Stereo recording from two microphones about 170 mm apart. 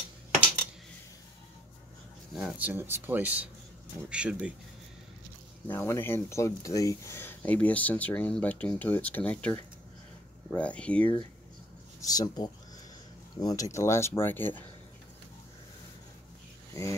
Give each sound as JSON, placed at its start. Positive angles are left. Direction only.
{"t": 2.3, "sound": "speech", "side_deg": -5}
{"t": 5.7, "sound": "speech", "side_deg": 15}
{"t": 12.0, "sound": "speech", "side_deg": 20}
{"t": 16.8, "sound": "speech", "side_deg": 20}